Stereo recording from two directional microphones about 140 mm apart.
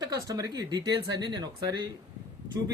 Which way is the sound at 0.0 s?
25° right (ahead or behind).